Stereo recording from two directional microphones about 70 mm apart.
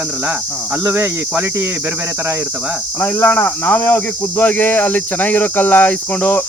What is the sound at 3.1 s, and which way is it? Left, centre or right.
Speech, left.